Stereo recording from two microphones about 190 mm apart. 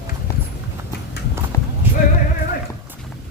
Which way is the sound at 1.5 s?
15° left (ahead or behind).